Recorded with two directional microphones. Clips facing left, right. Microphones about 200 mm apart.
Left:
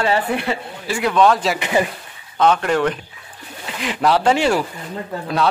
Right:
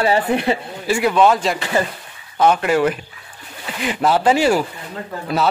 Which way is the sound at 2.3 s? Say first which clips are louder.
Right 1 dB; 10° right (ahead or behind).